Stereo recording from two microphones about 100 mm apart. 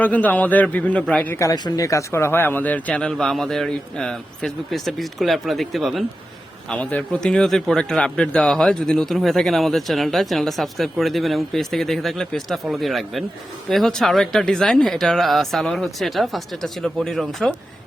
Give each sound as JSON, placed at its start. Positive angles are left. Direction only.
{"t": 0.0, "sound": "speech", "side_deg": 15}
{"t": 1.3, "sound": "speech", "side_deg": 30}
{"t": 1.5, "sound": "a man's voice", "side_deg": 40}